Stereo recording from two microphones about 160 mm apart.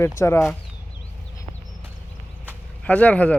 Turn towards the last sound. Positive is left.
turn(degrees=10)  # may be behind; listen again after turning